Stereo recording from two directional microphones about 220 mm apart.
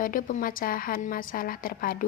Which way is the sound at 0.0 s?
40° left (ahead or behind).